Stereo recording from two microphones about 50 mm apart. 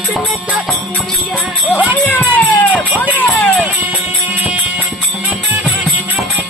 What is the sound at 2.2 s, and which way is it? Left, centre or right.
Music, left.